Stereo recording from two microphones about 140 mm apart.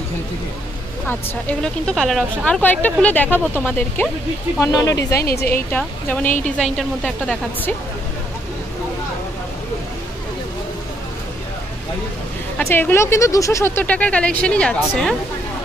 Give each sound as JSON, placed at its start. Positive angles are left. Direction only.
{"t": 1.0, "sound": "speech", "side_deg": 10}
{"t": 4.6, "sound": "speech", "side_deg": 25}
{"t": 5.2, "sound": "a woman's voice", "side_deg": 90}
{"t": 5.7, "sound": "a woman's voice", "side_deg": 10}
{"t": 12.5, "sound": "a woman's voice", "side_deg": 15}